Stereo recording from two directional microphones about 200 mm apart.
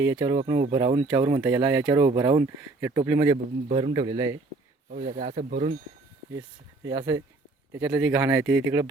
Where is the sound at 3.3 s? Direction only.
30° right (ahead or behind).